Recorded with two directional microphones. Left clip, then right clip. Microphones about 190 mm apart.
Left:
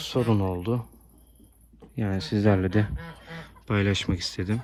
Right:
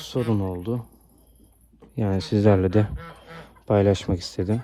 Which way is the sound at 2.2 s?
40° left (ahead or behind).